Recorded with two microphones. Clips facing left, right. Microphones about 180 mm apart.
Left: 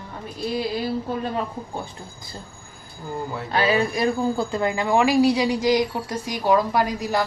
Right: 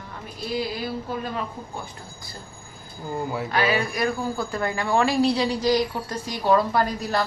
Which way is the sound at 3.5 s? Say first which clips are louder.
Left 4 dB; 30° left (ahead or behind).